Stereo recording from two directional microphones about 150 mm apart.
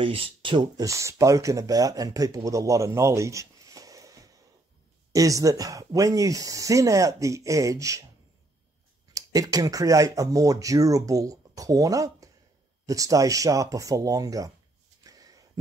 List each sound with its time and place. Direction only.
0.0 s speech: 35° right (ahead or behind); by 8.0 s 20° right (ahead or behind)
9.1 s speech: 25° right (ahead or behind)
15.0 s a sound: 25° right (ahead or behind)